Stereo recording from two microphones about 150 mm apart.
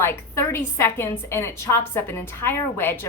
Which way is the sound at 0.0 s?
15° left (ahead or behind).